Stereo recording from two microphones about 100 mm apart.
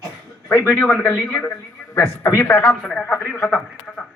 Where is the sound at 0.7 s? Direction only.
15° left (ahead or behind).